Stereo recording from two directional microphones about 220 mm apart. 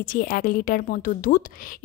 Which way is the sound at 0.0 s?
40° left (ahead or behind).